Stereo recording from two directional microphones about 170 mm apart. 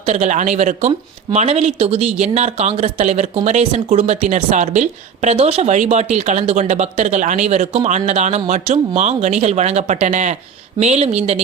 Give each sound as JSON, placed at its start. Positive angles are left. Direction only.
{"t": 0.0, "sound": "a man's voice", "side_deg": -40}